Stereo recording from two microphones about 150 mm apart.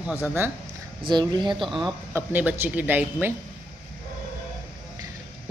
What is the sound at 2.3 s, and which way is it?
A woman's voice, 15° right (ahead or behind).